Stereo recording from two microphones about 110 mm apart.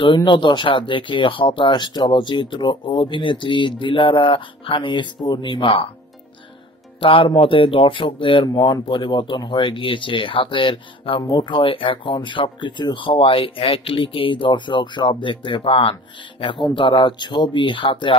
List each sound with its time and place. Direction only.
0.0 s speech: 45° left (ahead or behind)
7.0 s speech: 50° left (ahead or behind)